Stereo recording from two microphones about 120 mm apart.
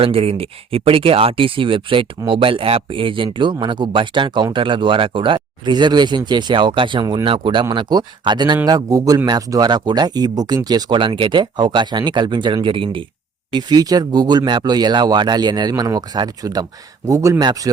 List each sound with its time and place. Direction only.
0.0 s a man's voice: 55° right (ahead or behind); by 7.3 s 35° right (ahead or behind)
7.3 s a man's voice: 45° right (ahead or behind)